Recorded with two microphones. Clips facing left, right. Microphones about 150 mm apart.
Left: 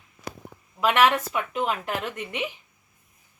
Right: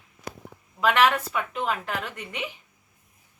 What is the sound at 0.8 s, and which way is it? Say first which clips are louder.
Speech: left 1 dB; 10° left (ahead or behind).